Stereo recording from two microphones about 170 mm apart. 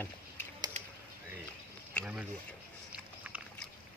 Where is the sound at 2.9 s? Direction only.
10° right (ahead or behind).